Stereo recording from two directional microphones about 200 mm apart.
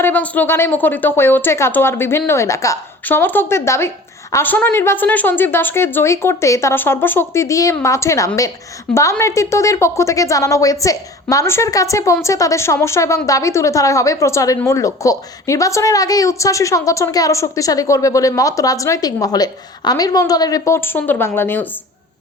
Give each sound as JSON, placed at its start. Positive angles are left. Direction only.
{"t": 0.0, "sound": "a woman's voice", "side_deg": 10}